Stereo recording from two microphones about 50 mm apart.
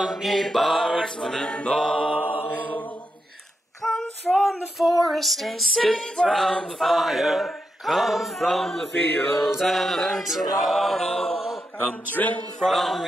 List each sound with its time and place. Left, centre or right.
0.0 s female singing: centre
0.8 s mantra: centre
2.1 s music: right
3.8 s female singing: centre
9.5 s female singing: centre
12.1 s speech: left
12.6 s female singing: centre